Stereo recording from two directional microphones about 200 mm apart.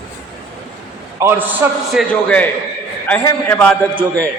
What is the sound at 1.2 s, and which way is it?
Speech, 15° right (ahead or behind).